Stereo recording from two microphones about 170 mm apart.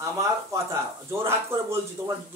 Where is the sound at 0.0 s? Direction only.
20° right (ahead or behind).